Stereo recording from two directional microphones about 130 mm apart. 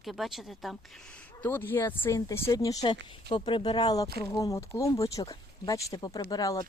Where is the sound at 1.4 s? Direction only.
15° left (ahead or behind).